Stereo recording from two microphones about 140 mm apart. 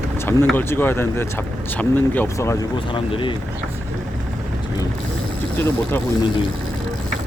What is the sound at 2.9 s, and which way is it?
Speech, 35° left (ahead or behind).